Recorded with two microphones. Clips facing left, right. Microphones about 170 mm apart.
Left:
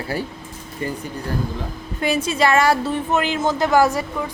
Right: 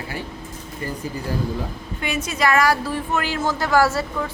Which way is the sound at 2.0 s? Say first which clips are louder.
Left 4 dB; 30° left (ahead or behind).